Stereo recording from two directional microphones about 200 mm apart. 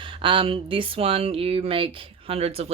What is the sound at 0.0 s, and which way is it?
Speech, 25° right (ahead or behind).